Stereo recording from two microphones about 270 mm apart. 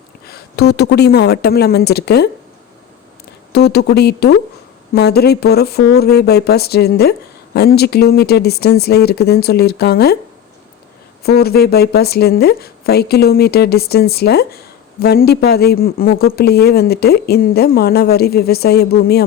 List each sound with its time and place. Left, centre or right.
0.3 s speech: left
3.5 s speech: left
11.2 s speech: left